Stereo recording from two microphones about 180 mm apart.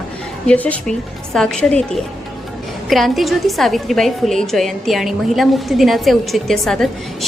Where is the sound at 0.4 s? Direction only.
10° left (ahead or behind).